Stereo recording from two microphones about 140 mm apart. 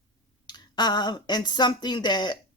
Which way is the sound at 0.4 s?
30° left (ahead or behind).